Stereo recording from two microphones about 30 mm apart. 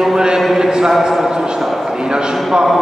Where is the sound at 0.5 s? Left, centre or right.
Centre.